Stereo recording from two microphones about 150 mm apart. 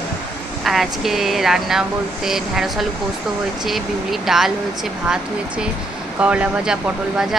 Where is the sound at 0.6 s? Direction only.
Centre (ahead or behind).